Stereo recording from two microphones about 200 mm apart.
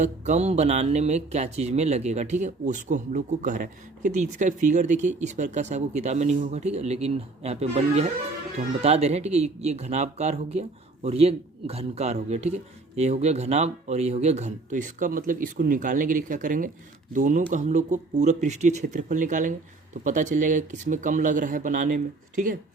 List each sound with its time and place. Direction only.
0.0 s speech: 35° right (ahead or behind)